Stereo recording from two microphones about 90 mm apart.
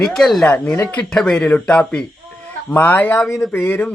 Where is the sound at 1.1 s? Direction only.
10° left (ahead or behind).